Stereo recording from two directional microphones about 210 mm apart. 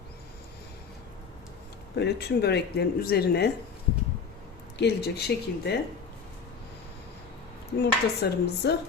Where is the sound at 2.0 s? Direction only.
50° left (ahead or behind).